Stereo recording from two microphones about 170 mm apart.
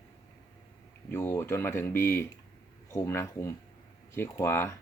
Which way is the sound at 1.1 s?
15° left (ahead or behind).